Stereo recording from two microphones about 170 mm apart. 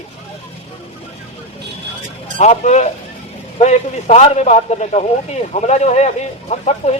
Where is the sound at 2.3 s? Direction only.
40° left (ahead or behind).